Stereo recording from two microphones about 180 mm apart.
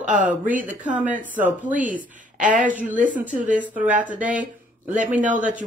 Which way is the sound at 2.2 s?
45° right (ahead or behind).